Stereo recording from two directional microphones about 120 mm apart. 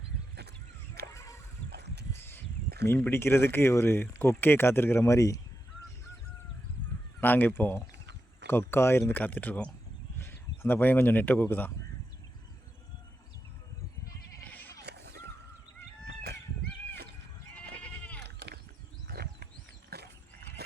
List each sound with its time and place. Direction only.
1.1 s a sound: 25° left (ahead or behind)
3.0 s speech: 20° left (ahead or behind)
7.2 s speech: 15° left (ahead or behind)
14.4 s sheep: 15° left (ahead or behind)
17.5 s goat: 10° left (ahead or behind)